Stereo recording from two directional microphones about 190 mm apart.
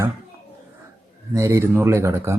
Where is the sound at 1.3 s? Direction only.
15° right (ahead or behind).